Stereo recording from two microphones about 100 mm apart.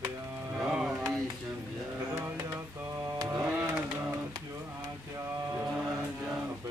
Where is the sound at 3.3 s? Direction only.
20° right (ahead or behind).